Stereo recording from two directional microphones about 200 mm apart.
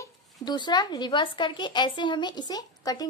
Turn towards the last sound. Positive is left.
turn(degrees=20)  # may be behind; listen again after turning